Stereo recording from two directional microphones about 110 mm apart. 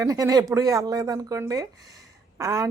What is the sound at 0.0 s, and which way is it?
A woman's voice, 30° right (ahead or behind).